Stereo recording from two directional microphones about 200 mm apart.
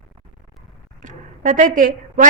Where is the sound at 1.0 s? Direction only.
40° right (ahead or behind).